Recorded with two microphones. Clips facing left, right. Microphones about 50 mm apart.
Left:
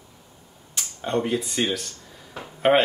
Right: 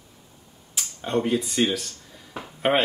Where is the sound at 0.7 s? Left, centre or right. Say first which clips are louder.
Even; centre.